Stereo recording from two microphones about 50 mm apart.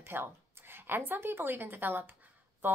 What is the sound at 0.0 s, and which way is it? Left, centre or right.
A woman's voice, right.